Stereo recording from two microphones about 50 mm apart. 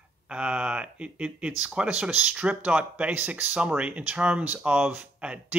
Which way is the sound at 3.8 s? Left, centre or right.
Right.